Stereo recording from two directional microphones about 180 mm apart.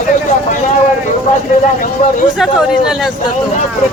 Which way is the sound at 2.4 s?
Centre (ahead or behind).